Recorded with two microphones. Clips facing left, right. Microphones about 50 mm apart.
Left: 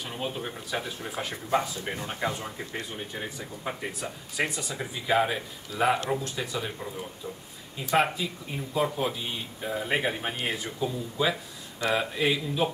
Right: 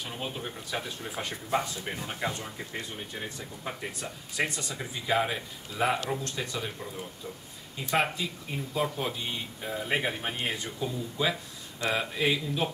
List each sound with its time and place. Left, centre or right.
0.1 s speech: centre